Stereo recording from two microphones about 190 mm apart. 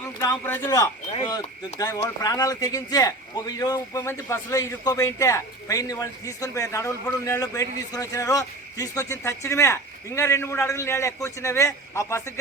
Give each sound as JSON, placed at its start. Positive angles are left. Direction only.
{"t": 0.2, "sound": "a man's voice", "side_deg": 15}